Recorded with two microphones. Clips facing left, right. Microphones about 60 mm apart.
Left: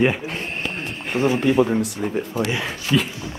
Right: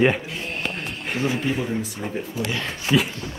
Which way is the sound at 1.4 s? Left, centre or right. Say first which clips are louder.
Left 7 dB; left.